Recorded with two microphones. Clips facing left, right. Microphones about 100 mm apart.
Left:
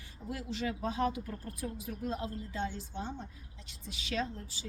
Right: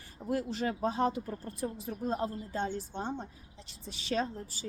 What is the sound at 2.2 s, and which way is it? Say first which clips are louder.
A woman's voice: right 3 dB; 45° right (ahead or behind).